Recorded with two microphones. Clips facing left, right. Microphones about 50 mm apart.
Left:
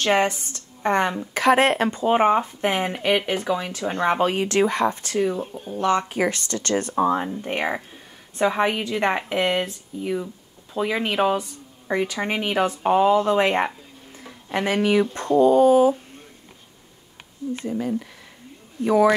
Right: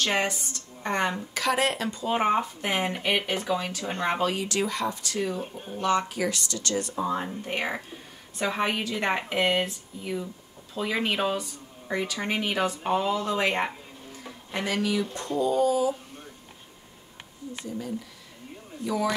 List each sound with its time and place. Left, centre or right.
0.1 s speech: left
7.4 s speech: left
17.6 s speech: left